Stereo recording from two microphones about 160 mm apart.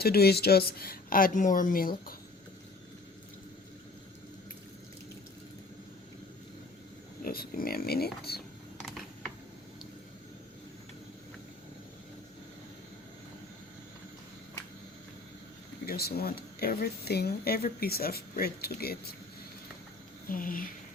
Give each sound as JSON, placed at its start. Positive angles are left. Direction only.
{"t": 0.0, "sound": "speech", "side_deg": 80}
{"t": 7.3, "sound": "speech", "side_deg": 65}
{"t": 15.9, "sound": "speech", "side_deg": 75}
{"t": 20.2, "sound": "speech", "side_deg": 60}